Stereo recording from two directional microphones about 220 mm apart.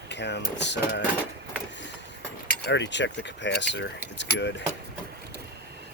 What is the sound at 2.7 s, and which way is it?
Speech, 55° left (ahead or behind).